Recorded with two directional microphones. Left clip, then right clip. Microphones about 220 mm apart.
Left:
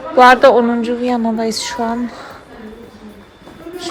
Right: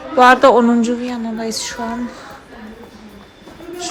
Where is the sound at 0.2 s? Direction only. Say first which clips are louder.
Left 2 dB; 15° right (ahead or behind).